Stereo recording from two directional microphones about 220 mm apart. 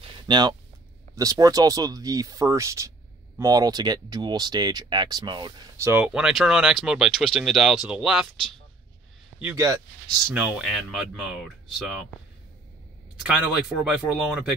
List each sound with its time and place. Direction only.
0.3 s speech: 20° right (ahead or behind); by 8.3 s 5° right (ahead or behind)
9.4 s speech: 10° right (ahead or behind)
13.2 s speech: 5° right (ahead or behind)